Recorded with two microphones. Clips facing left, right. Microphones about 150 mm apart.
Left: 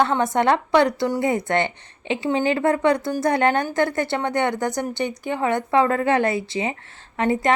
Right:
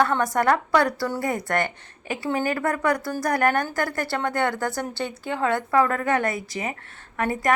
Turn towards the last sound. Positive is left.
turn(degrees=25)  # may be behind; listen again after turning